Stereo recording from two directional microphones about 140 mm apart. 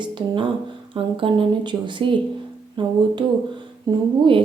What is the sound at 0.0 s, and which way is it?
A woman's voice, 35° right (ahead or behind).